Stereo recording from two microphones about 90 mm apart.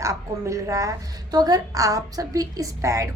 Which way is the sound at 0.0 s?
35° right (ahead or behind).